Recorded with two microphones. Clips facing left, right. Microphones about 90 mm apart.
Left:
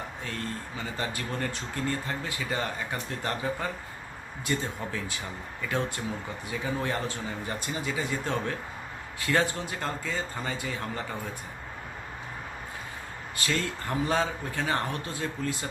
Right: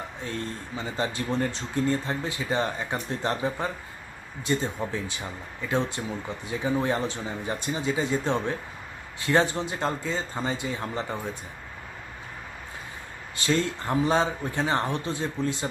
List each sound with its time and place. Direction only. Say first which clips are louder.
0.3 s speech: right 3 dB; 25° right (ahead or behind)
13.3 s speech: right 5 dB; 25° right (ahead or behind)